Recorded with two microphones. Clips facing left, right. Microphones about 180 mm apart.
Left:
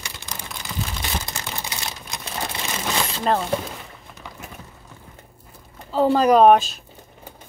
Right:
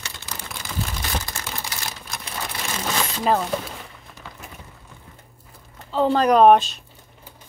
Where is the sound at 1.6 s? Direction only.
20° left (ahead or behind).